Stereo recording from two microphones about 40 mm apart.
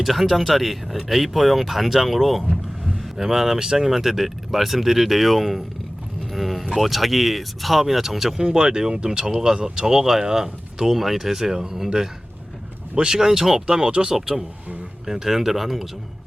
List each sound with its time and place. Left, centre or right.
0.0 s speech: centre
8.4 s speech: right
13.7 s speech: right
14.1 s speech: centre